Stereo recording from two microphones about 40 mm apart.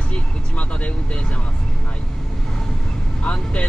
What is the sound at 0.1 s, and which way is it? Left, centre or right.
Speech, left.